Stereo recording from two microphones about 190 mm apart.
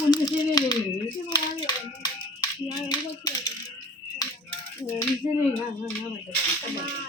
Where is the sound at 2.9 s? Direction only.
20° left (ahead or behind).